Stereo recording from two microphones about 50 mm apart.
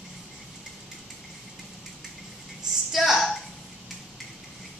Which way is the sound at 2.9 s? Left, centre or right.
Centre.